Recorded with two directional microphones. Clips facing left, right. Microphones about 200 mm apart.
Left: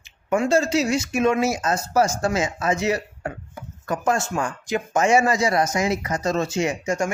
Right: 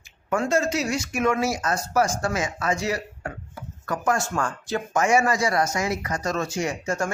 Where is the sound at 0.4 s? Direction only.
30° left (ahead or behind).